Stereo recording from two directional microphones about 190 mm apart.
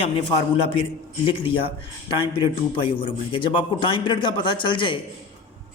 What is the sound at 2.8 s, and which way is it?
A man's voice, 25° left (ahead or behind).